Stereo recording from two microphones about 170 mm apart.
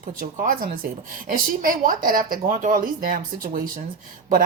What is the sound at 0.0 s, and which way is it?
A woman's voice, 55° right (ahead or behind).